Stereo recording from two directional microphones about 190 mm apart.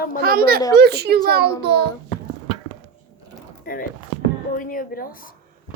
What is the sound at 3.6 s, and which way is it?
Speech, 50° left (ahead or behind).